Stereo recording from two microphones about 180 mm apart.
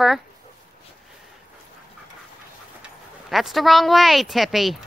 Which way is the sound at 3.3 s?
Centre (ahead or behind).